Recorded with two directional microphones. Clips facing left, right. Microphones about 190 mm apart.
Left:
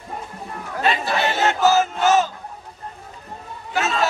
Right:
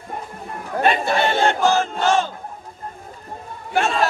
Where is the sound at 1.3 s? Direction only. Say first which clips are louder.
Right 2 dB; 30° right (ahead or behind).